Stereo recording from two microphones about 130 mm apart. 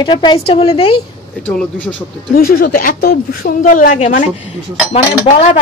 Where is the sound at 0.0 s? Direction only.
40° left (ahead or behind).